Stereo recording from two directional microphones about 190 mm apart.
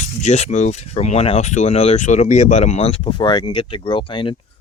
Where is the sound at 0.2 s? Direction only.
35° left (ahead or behind).